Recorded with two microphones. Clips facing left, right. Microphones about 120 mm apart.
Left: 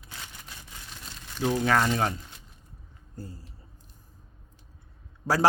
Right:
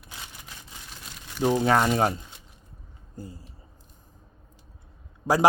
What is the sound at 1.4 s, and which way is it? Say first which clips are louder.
Speech: right 3 dB; 25° right (ahead or behind).